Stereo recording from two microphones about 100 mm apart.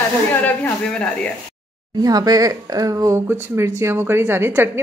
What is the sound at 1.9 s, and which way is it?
A woman's voice, 40° right (ahead or behind).